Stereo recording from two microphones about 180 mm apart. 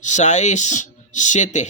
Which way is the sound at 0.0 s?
40° left (ahead or behind).